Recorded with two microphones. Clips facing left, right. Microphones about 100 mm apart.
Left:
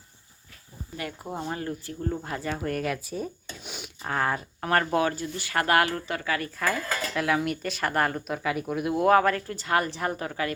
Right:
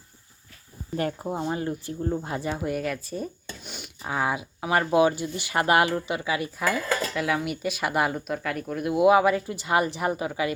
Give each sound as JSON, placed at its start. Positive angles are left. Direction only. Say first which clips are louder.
{"t": 1.2, "sound": "speech", "louder": "right 4 dB", "side_deg": -20}
{"t": 2.6, "sound": "speech", "louder": "right 1 dB", "side_deg": -5}
{"t": 7.1, "sound": "speech", "louder": "left 1 dB", "side_deg": 0}
{"t": 8.4, "sound": "speech", "louder": "left 1 dB", "side_deg": 5}